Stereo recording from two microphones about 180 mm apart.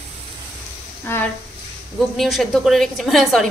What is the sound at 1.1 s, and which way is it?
Speech, 10° left (ahead or behind).